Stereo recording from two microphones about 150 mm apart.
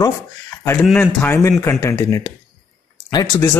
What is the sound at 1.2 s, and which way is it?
Speech, 20° left (ahead or behind).